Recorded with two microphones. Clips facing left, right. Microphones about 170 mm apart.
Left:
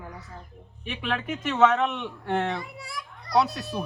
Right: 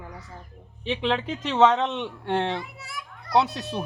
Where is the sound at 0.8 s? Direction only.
25° right (ahead or behind).